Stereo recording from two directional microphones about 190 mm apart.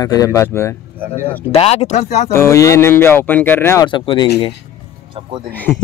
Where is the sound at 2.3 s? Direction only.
15° left (ahead or behind).